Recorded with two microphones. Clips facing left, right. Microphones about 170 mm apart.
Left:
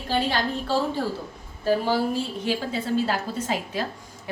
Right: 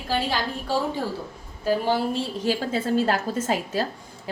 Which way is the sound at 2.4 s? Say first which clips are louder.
Right 2 dB; 45° right (ahead or behind).